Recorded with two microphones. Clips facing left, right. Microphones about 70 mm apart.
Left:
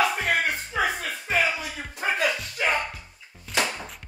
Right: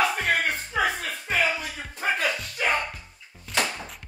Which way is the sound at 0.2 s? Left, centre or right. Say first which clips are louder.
Even; centre.